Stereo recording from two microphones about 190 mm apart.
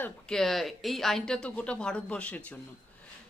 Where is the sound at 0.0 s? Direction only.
5° left (ahead or behind).